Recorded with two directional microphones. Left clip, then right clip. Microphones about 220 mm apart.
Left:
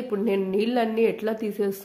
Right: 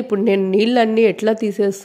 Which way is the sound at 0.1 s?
35° right (ahead or behind).